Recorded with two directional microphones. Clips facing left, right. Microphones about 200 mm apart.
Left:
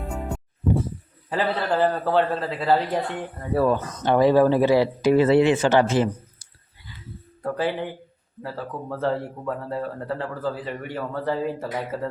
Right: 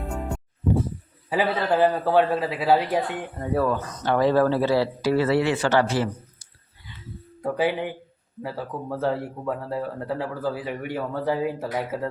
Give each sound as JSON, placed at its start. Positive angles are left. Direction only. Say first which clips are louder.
{"t": 0.0, "sound": "music", "louder": "even", "side_deg": 0}
{"t": 1.3, "sound": "speech", "louder": "right 1 dB", "side_deg": -10}
{"t": 3.7, "sound": "speech", "louder": "left 3 dB", "side_deg": 20}
{"t": 7.4, "sound": "speech", "louder": "right 1 dB", "side_deg": -10}